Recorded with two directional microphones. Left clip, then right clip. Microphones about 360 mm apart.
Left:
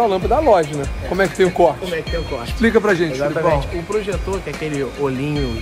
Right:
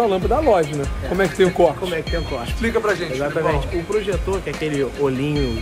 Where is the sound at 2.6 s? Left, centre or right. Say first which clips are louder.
Left 5 dB; left.